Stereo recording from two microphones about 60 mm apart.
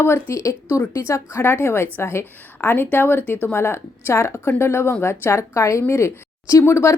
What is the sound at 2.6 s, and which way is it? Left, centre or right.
A woman's voice, left.